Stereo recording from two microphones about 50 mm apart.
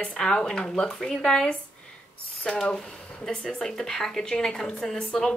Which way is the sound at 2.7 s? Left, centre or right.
Centre.